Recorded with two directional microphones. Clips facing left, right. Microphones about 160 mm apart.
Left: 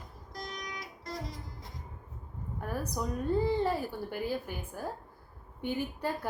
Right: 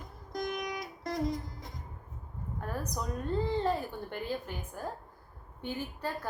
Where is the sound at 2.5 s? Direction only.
10° left (ahead or behind).